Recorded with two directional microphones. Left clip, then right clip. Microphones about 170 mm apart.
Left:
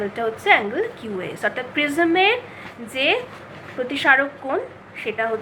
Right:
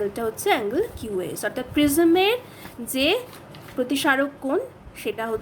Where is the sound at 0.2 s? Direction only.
90° right.